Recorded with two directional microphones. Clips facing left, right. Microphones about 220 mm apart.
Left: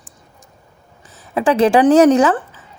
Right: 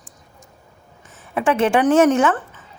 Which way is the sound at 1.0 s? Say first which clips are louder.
Left 3 dB; 35° left (ahead or behind).